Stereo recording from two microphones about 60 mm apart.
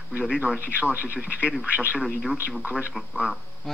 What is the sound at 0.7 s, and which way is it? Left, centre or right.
Speech, right.